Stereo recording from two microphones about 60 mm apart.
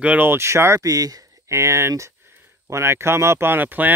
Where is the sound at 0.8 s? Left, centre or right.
Right.